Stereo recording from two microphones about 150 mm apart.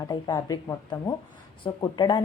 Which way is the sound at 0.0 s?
25° left (ahead or behind).